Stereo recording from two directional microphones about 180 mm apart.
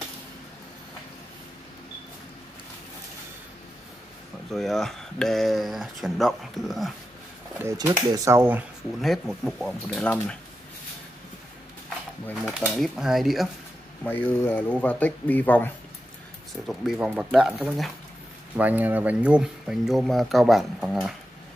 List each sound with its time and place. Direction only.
4.5 s speech: centre (ahead or behind)
7.6 s speech: 15° right (ahead or behind)
9.0 s speech: centre (ahead or behind)
12.6 s speech: centre (ahead or behind)
14.0 s speech: 10° left (ahead or behind)
16.6 s speech: centre (ahead or behind)